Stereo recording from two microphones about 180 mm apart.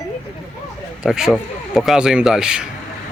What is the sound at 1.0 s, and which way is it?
A man's voice, 5° right (ahead or behind).